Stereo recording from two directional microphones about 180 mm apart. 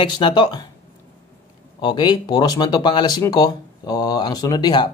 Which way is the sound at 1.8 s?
25° left (ahead or behind).